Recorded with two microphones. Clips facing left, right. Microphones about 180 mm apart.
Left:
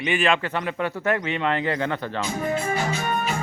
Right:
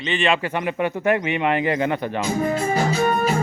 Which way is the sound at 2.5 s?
35° right (ahead or behind).